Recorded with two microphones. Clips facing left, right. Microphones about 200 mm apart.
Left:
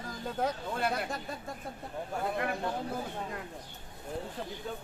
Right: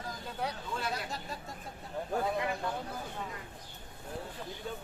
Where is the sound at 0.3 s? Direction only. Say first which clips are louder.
Left 5 dB; 50° left (ahead or behind).